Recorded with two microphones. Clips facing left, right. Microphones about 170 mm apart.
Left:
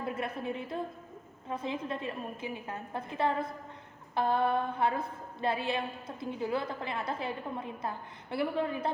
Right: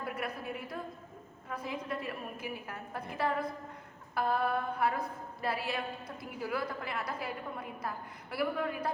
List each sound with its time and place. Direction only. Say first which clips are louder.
0.0 s a woman's voice: left 3 dB; 25° left (ahead or behind)